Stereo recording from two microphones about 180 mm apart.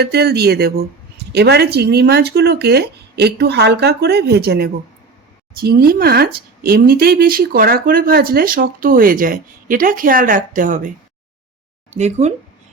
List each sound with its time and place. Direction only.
0.0 s speech: 65° right (ahead or behind); by 10.9 s 45° right (ahead or behind)
11.9 s speech: 40° right (ahead or behind)